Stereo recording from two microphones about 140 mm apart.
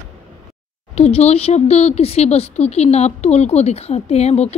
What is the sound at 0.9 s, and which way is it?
Speech, 50° left (ahead or behind).